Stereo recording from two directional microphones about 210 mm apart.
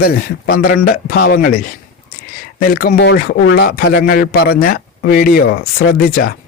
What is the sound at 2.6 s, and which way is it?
Speech, 45° left (ahead or behind).